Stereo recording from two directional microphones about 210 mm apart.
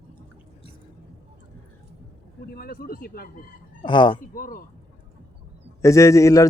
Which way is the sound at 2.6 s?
45° left (ahead or behind).